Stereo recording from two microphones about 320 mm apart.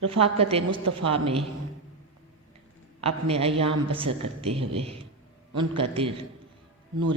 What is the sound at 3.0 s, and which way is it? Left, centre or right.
A woman's voice, centre.